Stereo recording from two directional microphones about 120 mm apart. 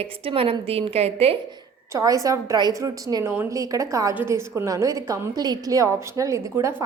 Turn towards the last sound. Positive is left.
turn(degrees=-25)  # may be behind; listen again after turning